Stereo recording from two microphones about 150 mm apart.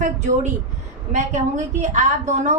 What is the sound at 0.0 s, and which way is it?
A woman's voice, 50° right (ahead or behind).